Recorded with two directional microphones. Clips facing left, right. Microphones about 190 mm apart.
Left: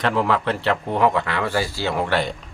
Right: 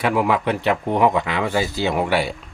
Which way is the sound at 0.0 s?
10° right (ahead or behind).